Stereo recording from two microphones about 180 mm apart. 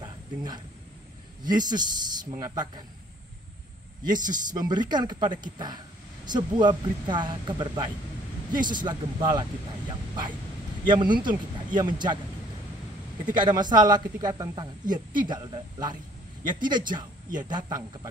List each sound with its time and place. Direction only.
0.0 s a sound: 25° right (ahead or behind)
1.4 s speech: 25° right (ahead or behind)
4.0 s speech: 25° right (ahead or behind)
13.2 s speech: 25° right (ahead or behind)